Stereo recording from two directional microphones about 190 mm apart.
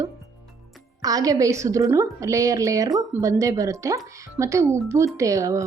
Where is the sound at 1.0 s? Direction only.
20° right (ahead or behind).